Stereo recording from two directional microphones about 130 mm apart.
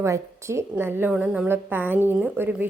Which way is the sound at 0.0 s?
20° right (ahead or behind).